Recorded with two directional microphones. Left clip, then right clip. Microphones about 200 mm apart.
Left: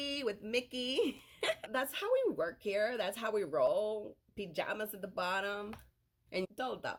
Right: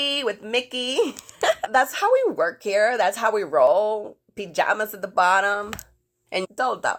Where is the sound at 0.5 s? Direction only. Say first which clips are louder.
Right 12 dB; 35° left (ahead or behind).